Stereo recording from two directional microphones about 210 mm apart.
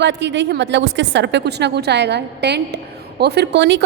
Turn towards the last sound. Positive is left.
turn(degrees=-60)  # may be behind; listen again after turning